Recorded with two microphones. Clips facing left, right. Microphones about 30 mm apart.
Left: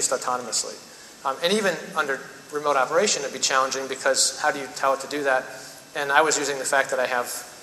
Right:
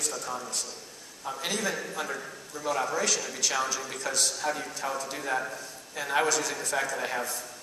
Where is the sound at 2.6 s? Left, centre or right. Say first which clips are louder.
Left 8 dB; left.